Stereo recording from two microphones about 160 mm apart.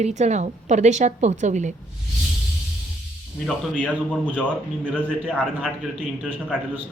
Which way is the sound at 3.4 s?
10° left (ahead or behind).